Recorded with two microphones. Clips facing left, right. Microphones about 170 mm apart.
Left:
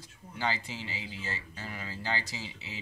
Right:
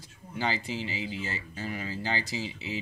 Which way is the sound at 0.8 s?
15° right (ahead or behind).